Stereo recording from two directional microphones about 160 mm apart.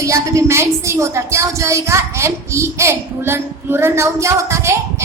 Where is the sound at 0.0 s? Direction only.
20° right (ahead or behind).